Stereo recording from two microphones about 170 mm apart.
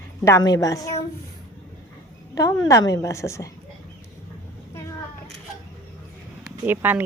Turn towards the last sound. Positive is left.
turn(degrees=-10)  # may be behind; listen again after turning